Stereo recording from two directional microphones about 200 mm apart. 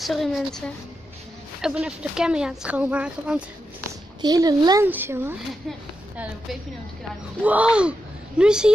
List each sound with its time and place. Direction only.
0.0 s speech: centre (ahead or behind)
4.2 s a child's voice: 20° right (ahead or behind)
7.4 s speech: 5° right (ahead or behind)